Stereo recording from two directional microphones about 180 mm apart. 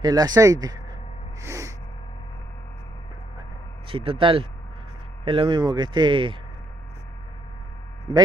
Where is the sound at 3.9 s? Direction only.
30° right (ahead or behind).